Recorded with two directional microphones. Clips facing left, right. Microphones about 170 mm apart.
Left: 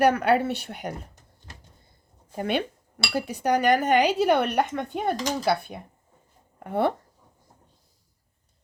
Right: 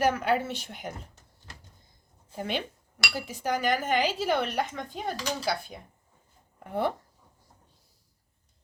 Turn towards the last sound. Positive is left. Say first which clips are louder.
# left 5 dB
turn(degrees=65)  # may be behind; listen again after turning